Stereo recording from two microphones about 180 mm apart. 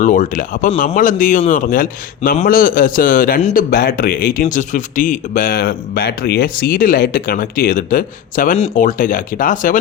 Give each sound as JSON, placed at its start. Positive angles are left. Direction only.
{"t": 0.0, "sound": "speech", "side_deg": 45}
{"t": 8.5, "sound": "speech", "side_deg": 35}
{"t": 8.8, "sound": "speech", "side_deg": 50}